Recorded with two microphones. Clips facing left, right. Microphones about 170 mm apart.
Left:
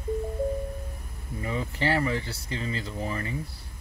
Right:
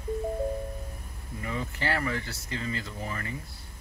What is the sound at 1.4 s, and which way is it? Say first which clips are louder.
Speech: left 4 dB; 25° left (ahead or behind).